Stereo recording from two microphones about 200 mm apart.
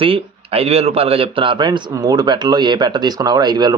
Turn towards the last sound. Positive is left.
turn(degrees=-20)  # may be behind; listen again after turning